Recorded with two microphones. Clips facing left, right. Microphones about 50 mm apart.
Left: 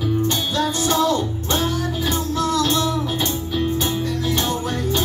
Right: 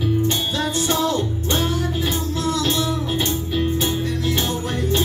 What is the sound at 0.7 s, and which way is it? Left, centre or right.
Music, centre.